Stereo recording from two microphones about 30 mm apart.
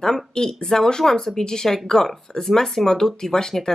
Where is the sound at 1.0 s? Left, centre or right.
Centre.